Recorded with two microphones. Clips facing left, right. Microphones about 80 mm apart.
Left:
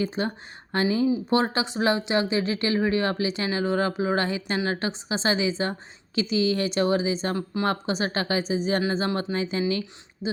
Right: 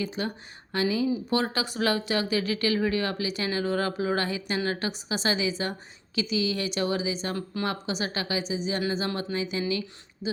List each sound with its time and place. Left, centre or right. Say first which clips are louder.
0.0 s a woman's voice: left 4 dB; left